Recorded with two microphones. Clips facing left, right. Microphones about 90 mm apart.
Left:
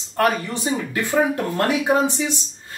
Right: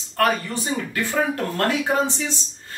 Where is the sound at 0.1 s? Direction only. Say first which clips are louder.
Left 1 dB; 20° left (ahead or behind).